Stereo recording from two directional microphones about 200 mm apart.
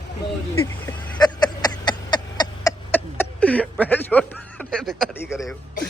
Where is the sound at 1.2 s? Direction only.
20° left (ahead or behind).